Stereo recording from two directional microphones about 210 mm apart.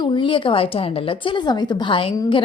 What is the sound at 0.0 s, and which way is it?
A woman's voice, 25° left (ahead or behind).